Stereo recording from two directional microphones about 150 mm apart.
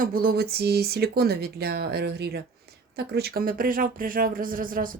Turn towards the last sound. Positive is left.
turn(degrees=-70)  # may be behind; listen again after turning